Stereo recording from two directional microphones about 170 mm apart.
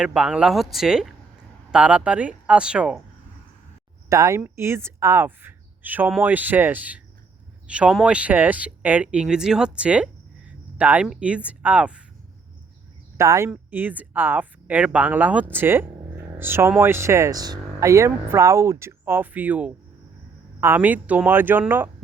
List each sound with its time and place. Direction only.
0.0 s speech: 5° right (ahead or behind)
4.1 s speech: 20° right (ahead or behind)
13.1 s speech: 15° right (ahead or behind)